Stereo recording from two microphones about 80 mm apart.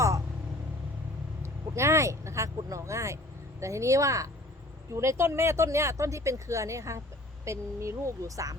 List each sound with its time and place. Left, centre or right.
1.4 s vehicle: right
3.6 s speech: right